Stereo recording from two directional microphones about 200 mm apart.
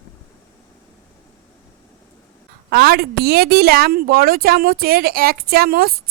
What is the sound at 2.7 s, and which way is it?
A woman's voice, 50° right (ahead or behind).